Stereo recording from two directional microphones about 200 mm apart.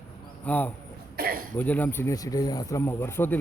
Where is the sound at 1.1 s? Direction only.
50° right (ahead or behind).